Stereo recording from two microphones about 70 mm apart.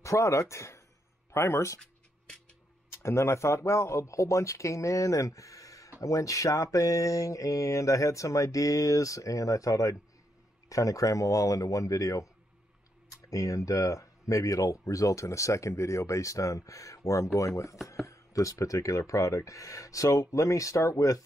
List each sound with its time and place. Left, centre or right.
0.0 s speech: left
2.9 s speech: left